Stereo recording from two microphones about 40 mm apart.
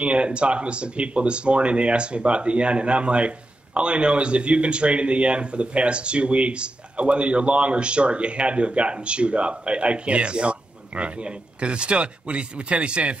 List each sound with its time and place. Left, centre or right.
0.0 s speech: right